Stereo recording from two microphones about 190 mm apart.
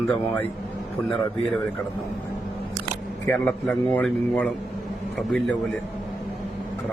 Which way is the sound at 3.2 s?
10° left (ahead or behind).